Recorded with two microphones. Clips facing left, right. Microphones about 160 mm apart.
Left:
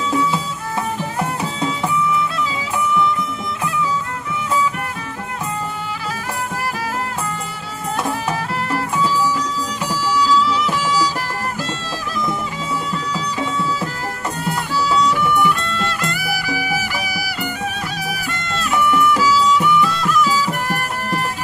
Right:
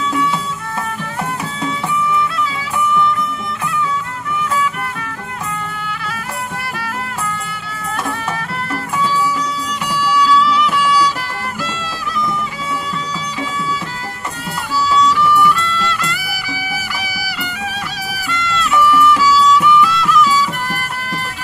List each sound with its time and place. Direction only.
9.8 s music: 40° left (ahead or behind)
15.0 s music: 50° left (ahead or behind)